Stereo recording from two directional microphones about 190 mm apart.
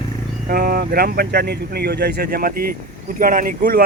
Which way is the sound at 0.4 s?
50° right (ahead or behind).